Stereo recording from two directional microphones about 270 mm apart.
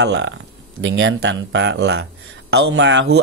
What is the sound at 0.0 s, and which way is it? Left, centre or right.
Speech, right.